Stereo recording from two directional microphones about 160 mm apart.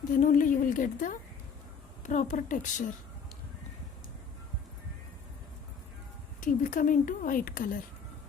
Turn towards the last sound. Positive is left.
turn(degrees=60)  # may be behind; listen again after turning